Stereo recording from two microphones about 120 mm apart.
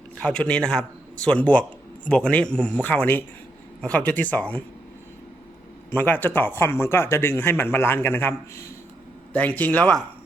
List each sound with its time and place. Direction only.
0.2 s a man's voice: 10° left (ahead or behind)
5.9 s a man's voice: 15° left (ahead or behind)